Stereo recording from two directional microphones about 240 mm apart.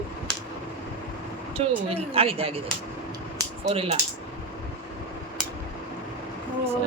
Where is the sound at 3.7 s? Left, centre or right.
Right.